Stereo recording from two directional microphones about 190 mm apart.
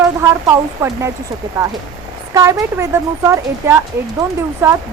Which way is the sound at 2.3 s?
15° right (ahead or behind).